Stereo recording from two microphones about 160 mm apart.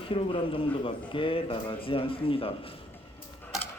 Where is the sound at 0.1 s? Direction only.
35° left (ahead or behind).